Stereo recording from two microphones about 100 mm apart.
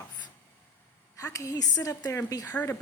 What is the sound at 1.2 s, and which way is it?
A woman's voice, 35° left (ahead or behind).